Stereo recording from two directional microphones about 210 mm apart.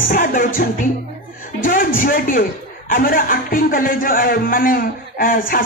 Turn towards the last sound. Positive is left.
turn(degrees=40)  # may be behind; listen again after turning